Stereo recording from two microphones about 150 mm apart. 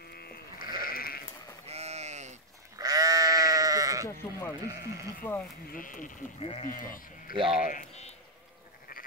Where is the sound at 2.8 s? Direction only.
25° right (ahead or behind).